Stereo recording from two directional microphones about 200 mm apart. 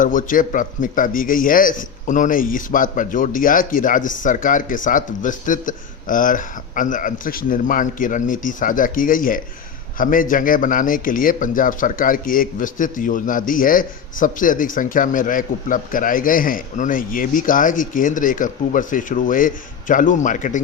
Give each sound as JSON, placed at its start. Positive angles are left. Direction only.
{"t": 0.0, "sound": "a man's voice", "side_deg": 40}